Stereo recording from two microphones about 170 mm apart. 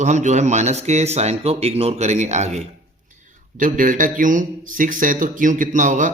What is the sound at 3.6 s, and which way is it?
Speech, 50° right (ahead or behind).